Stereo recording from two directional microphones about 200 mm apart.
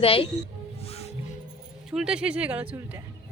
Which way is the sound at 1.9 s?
5° right (ahead or behind).